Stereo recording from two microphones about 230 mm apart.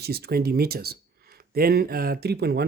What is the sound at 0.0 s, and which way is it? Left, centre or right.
Speech, right.